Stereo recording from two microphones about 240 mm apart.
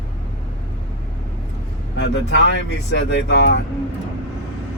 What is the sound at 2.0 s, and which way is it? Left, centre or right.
Speech, left.